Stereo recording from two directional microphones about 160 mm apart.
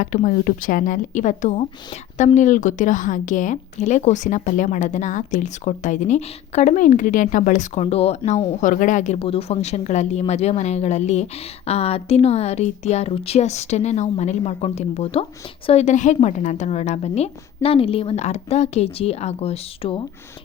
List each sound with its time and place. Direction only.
0.0 s a woman's voice: 55° left (ahead or behind); by 20.0 s 35° left (ahead or behind)